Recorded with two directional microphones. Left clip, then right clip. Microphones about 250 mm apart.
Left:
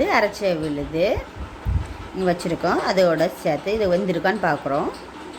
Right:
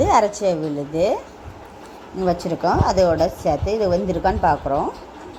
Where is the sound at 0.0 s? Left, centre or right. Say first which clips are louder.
Right 3 dB; centre.